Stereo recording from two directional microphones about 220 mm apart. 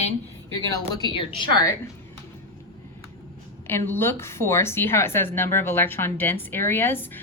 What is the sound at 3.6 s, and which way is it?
A woman's voice, 10° left (ahead or behind).